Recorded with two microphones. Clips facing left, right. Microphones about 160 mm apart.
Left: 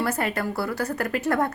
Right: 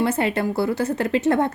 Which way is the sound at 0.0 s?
25° right (ahead or behind).